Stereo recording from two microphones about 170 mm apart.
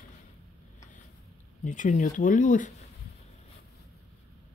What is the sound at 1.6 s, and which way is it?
Speech, 50° left (ahead or behind).